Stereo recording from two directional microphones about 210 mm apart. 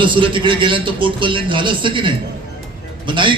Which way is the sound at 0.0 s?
25° right (ahead or behind).